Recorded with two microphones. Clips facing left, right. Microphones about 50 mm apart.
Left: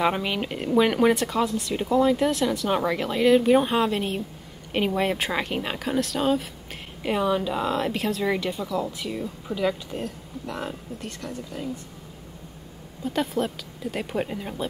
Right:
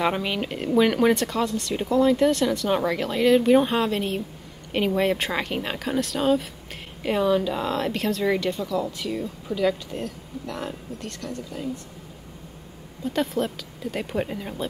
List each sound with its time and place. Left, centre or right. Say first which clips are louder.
0.0 s speech: even; centre
13.0 s speech: right 1 dB; centre